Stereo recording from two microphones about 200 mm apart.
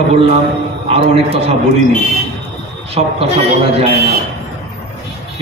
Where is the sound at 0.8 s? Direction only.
30° right (ahead or behind).